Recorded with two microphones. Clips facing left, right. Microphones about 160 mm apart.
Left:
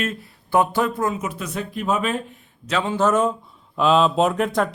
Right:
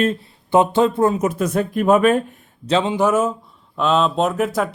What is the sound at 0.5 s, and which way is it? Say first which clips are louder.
Speech: right 5 dB; 25° right (ahead or behind).